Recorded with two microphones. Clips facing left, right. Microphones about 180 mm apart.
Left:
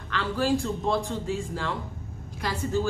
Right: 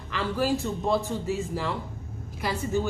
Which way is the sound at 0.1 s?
10° right (ahead or behind).